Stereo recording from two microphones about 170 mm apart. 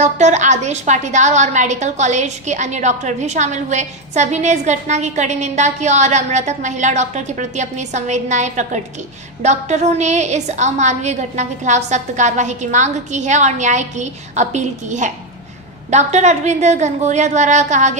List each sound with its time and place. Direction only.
0.0 s a woman's voice: 45° right (ahead or behind)